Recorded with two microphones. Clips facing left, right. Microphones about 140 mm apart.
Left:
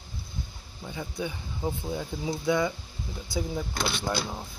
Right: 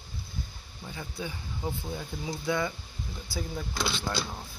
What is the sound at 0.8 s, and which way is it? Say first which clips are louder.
Speech: left 4 dB; 15° left (ahead or behind).